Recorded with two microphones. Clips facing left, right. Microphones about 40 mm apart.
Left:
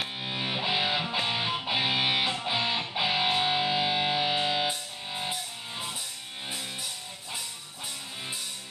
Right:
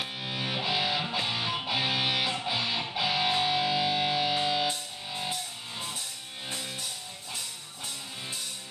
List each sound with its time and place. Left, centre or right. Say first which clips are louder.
0.2 s music: left 1 dB; centre